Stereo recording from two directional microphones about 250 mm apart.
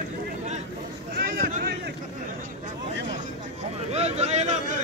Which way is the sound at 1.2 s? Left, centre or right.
Right.